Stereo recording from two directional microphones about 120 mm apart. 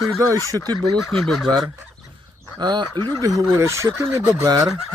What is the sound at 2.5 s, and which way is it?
Fowl, 35° right (ahead or behind).